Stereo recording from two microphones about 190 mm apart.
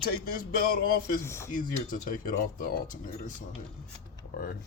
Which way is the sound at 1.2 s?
15° left (ahead or behind).